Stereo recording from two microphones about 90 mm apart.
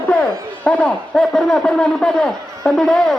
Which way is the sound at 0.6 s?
10° left (ahead or behind).